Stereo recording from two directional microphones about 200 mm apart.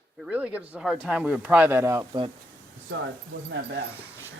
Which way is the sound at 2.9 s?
60° right (ahead or behind).